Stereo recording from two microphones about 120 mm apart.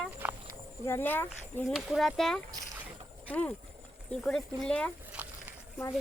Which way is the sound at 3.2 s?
15° left (ahead or behind).